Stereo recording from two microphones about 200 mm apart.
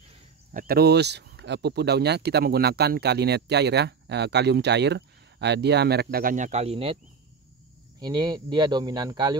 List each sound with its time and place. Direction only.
0.5 s speech: 45° right (ahead or behind); by 7.0 s 30° right (ahead or behind)
8.0 s speech: 20° right (ahead or behind)